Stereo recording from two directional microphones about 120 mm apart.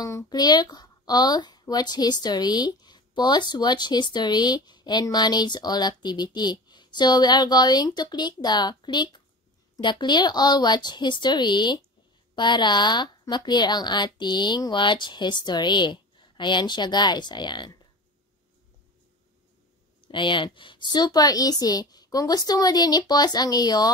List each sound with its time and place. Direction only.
0.0 s speech: 25° left (ahead or behind)
20.0 s speech: 40° left (ahead or behind)